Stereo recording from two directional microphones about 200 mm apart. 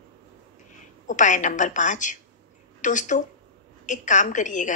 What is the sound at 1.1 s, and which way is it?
Speech, 40° left (ahead or behind).